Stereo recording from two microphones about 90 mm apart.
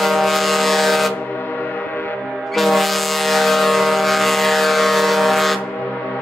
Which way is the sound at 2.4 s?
Centre (ahead or behind).